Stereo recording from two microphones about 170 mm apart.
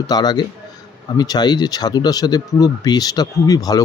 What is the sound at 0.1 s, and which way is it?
Speech, 25° left (ahead or behind).